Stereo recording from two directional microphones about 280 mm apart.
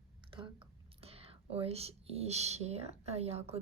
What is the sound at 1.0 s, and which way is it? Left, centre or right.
Speech, right.